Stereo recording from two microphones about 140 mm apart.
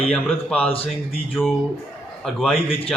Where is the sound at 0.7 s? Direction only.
45° left (ahead or behind).